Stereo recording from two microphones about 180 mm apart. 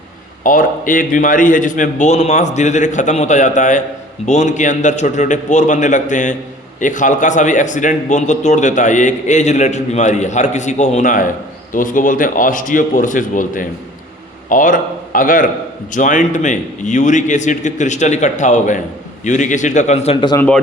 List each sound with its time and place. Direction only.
0.4 s a man's voice: 50° left (ahead or behind)
20.3 s speech: 10° left (ahead or behind)